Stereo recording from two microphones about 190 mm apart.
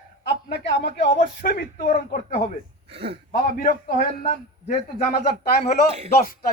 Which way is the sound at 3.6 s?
45° left (ahead or behind).